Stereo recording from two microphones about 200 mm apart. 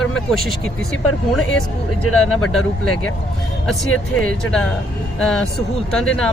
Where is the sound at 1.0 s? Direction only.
90° left.